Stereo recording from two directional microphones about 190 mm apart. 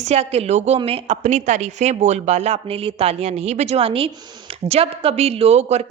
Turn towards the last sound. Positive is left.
turn(degrees=-35)  # may be behind; listen again after turning